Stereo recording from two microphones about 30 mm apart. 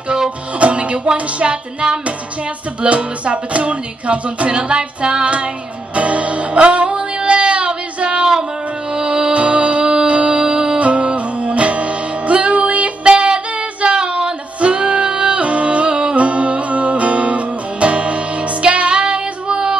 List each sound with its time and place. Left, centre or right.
0.6 s music: right
4.5 s music: right
9.4 s music: right
10.8 s music: right
13.0 s female singing: right
16.2 s music: right